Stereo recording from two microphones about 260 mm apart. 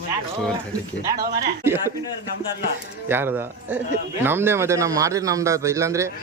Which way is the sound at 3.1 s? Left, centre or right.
Centre.